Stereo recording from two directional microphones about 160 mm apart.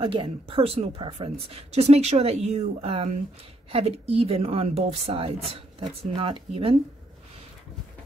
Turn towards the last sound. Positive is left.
turn(degrees=-35)  # may be behind; listen again after turning